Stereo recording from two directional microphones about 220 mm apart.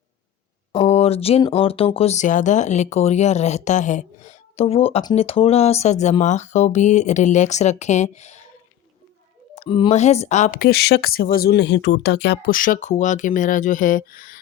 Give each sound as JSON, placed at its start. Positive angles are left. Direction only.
{"t": 0.9, "sound": "speech", "side_deg": 30}
{"t": 9.6, "sound": "speech", "side_deg": 20}